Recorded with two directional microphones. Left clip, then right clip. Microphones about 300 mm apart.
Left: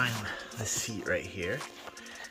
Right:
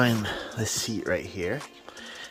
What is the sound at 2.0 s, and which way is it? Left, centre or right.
Music, right.